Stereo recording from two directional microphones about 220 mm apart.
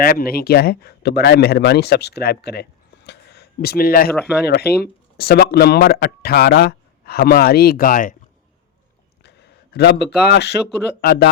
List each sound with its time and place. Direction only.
0.0 s speech: 40° left (ahead or behind)
9.2 s speech: 50° left (ahead or behind)